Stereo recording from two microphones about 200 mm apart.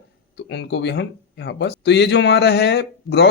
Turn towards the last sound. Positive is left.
turn(degrees=55)  # may be behind; listen again after turning